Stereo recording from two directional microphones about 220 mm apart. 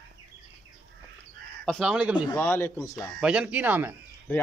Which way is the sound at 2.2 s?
10° left (ahead or behind).